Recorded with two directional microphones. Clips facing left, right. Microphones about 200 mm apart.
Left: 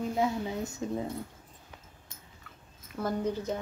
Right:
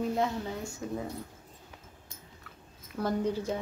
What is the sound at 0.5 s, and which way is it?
Speech, 25° left (ahead or behind).